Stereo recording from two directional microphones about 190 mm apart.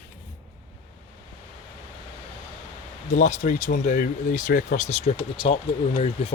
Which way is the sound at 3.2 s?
40° left (ahead or behind).